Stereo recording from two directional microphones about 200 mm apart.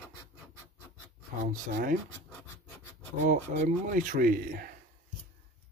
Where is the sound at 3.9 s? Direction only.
40° right (ahead or behind).